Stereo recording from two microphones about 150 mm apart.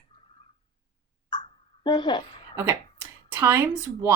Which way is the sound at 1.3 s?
30° left (ahead or behind).